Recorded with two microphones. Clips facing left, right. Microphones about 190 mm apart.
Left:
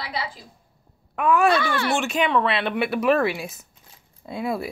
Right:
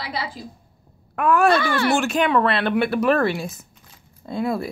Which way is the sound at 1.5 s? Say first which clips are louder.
Right 3 dB; 40° right (ahead or behind).